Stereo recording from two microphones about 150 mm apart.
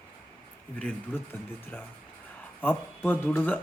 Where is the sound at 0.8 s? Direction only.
5° left (ahead or behind).